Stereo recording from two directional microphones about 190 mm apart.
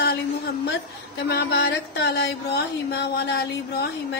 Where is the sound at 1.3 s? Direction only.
60° left (ahead or behind).